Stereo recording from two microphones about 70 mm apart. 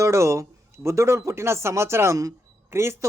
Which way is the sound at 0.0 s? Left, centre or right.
Right.